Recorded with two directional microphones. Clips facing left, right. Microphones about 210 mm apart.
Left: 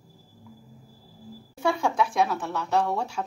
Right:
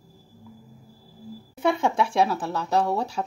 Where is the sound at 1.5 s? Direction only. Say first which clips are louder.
Right 2 dB; 20° right (ahead or behind).